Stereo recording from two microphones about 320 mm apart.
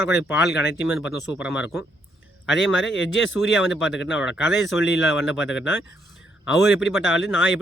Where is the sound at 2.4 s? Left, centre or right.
Left.